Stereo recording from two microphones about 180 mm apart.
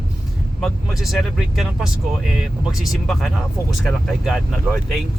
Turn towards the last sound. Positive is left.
turn(degrees=0)  # may be behind; listen again after turning